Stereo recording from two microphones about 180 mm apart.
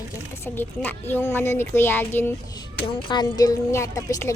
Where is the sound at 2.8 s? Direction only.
25° left (ahead or behind).